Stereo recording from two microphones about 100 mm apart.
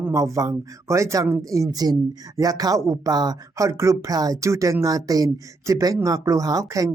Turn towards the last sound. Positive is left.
turn(degrees=-35)  # may be behind; listen again after turning